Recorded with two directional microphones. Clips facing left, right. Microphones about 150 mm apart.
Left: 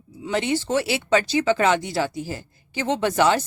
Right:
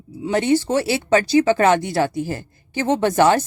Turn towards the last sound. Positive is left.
turn(degrees=-50)  # may be behind; listen again after turning